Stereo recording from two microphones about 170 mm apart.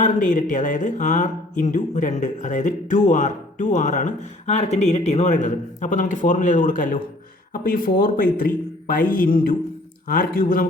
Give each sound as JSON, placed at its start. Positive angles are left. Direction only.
{"t": 0.0, "sound": "a man's voice", "side_deg": 50}